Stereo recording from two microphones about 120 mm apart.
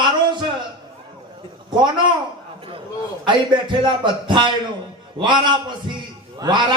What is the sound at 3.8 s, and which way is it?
A man's voice, 40° right (ahead or behind).